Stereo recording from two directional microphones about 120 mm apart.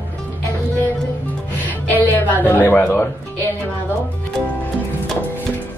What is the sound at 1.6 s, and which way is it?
Music, 15° left (ahead or behind).